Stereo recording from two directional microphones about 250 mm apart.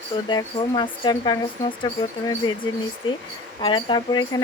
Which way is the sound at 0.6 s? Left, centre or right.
Centre.